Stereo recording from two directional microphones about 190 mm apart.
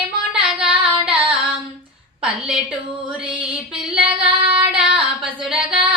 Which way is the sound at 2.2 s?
5° right (ahead or behind).